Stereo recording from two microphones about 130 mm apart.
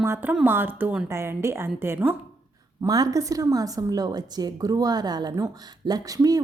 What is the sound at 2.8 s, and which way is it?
A woman's voice, 25° right (ahead or behind).